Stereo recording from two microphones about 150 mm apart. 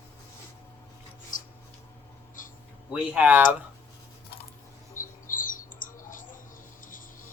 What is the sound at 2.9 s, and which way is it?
Speech, 10° right (ahead or behind).